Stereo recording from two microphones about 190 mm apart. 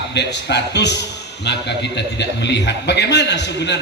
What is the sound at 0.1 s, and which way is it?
A man's voice, 65° left (ahead or behind).